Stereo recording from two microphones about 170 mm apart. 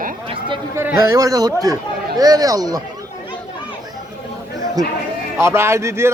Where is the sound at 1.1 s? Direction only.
20° right (ahead or behind).